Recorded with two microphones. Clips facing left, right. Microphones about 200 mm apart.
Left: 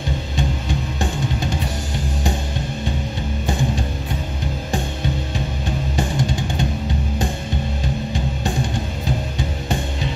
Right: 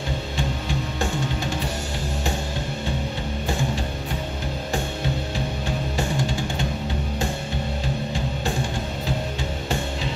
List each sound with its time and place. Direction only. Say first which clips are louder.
5.9 s music: left 4 dB; 15° left (ahead or behind)